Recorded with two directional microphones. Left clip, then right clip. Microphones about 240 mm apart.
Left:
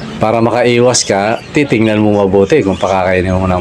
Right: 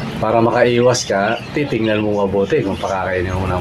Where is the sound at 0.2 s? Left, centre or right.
Left.